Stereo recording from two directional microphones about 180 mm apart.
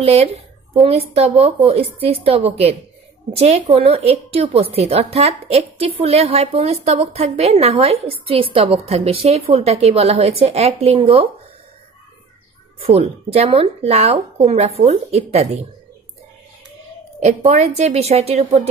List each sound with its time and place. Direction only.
0.0 s a woman's voice: 35° right (ahead or behind)
12.7 s a woman's voice: 35° right (ahead or behind)
17.5 s a woman's voice: 40° right (ahead or behind)